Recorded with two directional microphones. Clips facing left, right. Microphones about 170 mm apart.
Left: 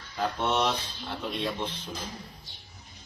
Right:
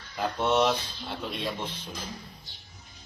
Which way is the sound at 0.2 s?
Centre (ahead or behind).